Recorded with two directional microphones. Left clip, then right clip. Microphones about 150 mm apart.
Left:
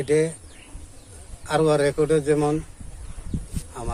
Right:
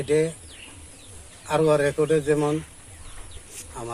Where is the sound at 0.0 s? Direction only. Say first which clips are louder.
Left 1 dB; 25° left (ahead or behind).